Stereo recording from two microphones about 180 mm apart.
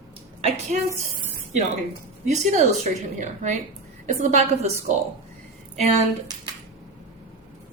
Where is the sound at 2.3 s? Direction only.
40° right (ahead or behind).